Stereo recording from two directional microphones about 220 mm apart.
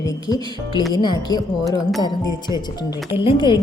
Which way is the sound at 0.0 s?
15° left (ahead or behind).